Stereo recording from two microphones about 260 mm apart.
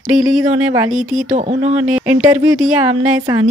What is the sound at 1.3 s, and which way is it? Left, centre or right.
Speech, right.